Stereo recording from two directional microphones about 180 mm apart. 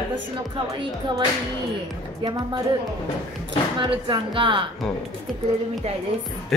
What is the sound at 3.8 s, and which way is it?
Speech, 25° right (ahead or behind).